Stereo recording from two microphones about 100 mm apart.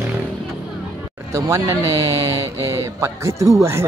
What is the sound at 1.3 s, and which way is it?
Speech, 30° right (ahead or behind).